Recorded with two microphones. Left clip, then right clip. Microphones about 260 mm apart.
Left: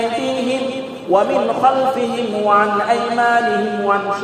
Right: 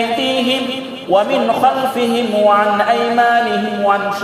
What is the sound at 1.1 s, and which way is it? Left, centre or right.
A man's voice, right.